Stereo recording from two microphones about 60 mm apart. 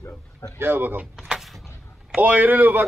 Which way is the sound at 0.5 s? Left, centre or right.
Right.